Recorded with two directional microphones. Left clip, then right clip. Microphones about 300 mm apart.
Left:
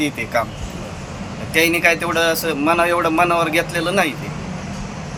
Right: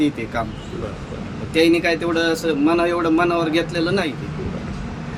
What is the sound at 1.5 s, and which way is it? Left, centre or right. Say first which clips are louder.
A man's voice: left 1 dB; centre.